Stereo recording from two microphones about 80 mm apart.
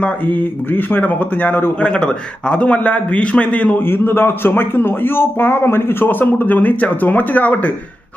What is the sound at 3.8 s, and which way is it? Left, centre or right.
A man's voice, left.